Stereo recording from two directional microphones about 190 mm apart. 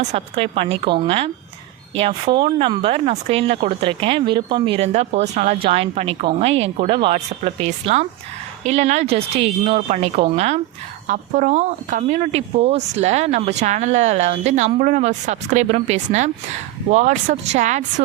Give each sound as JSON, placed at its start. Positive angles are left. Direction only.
{"t": 0.0, "sound": "a woman's voice", "side_deg": -30}